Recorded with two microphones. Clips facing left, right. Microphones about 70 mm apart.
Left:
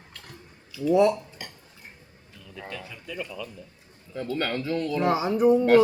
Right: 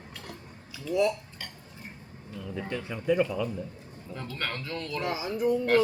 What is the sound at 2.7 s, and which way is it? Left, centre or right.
Speech, right.